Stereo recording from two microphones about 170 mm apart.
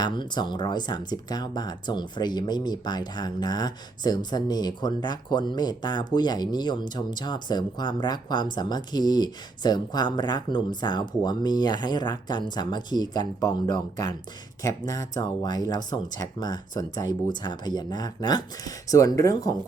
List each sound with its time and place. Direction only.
0.0 s speech: 25° left (ahead or behind)